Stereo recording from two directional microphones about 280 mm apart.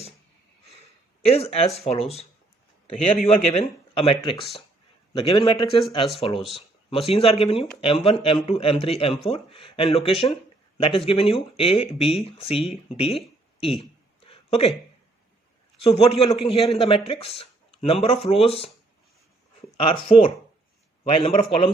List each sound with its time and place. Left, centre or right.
1.2 s speech: left
3.2 s speech: left
14.3 s a sound: left
15.8 s speech: left
19.7 s speech: centre